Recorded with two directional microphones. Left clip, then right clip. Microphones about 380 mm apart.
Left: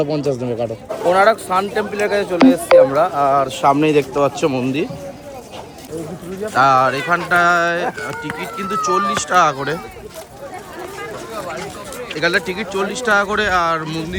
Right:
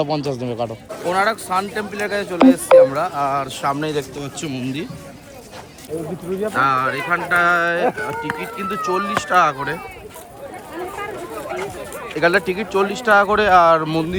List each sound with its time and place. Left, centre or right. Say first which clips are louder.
0.0 s speech: left 2 dB; centre
3.6 s a man's voice: left 8 dB; centre
4.2 s speech: left 12 dB; centre
6.5 s speech: left 5 dB; centre
12.2 s speech: right 1 dB; centre